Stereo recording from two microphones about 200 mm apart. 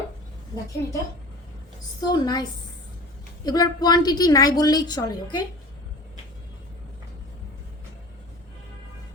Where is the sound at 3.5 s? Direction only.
20° left (ahead or behind).